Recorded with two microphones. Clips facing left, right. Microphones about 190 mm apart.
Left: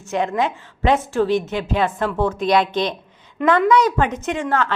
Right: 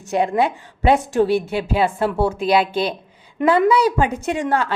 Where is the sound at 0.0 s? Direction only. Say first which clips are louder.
Right 2 dB; 35° right (ahead or behind).